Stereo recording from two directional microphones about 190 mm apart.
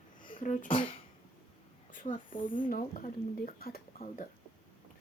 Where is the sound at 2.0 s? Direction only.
35° left (ahead or behind).